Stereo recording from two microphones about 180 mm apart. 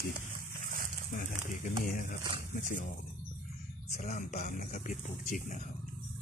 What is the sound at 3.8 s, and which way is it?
Speech, 40° left (ahead or behind).